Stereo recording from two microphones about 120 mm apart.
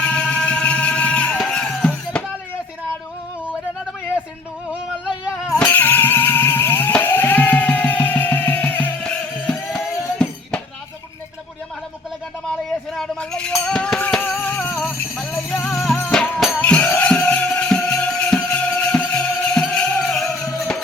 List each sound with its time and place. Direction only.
0.0 s music: 10° left (ahead or behind)
4.7 s a sound: 10° right (ahead or behind)
5.5 s music: 15° left (ahead or behind)
12.9 s music: 5° left (ahead or behind)
14.8 s music: centre (ahead or behind)